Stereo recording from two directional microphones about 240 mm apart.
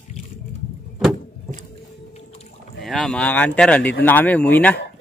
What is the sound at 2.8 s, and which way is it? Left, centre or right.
Speech, centre.